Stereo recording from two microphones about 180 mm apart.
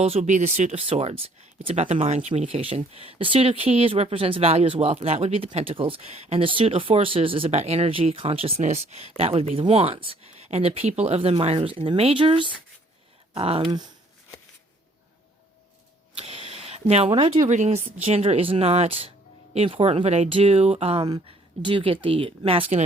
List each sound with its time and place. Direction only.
0.0 s speech: 35° right (ahead or behind)
16.1 s a sound: 35° right (ahead or behind)
17.5 s speech: 40° right (ahead or behind)